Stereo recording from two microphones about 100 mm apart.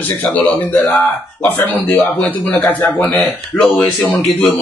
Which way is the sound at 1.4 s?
20° left (ahead or behind).